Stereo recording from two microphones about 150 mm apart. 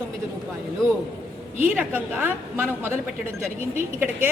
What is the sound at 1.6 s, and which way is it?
A woman's voice, 10° right (ahead or behind).